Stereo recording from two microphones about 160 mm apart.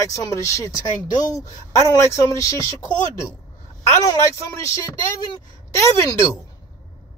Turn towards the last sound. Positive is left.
turn(degrees=20)  # may be behind; listen again after turning